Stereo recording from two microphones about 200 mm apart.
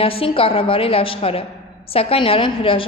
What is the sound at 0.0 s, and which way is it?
A woman's voice, 25° left (ahead or behind).